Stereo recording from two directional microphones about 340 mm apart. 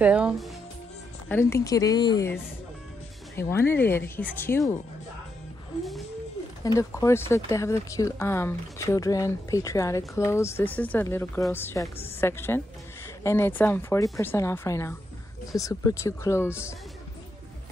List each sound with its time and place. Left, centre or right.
0.0 s speech: centre
1.3 s speech: centre
3.3 s speech: centre
6.6 s speech: centre